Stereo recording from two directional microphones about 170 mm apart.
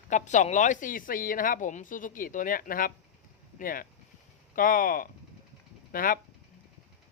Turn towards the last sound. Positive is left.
turn(degrees=55)  # may be behind; listen again after turning